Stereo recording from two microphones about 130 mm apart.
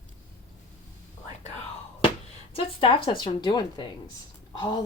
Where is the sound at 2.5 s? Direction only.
45° left (ahead or behind).